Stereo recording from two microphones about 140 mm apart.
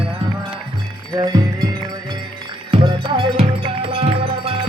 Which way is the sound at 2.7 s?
40° right (ahead or behind).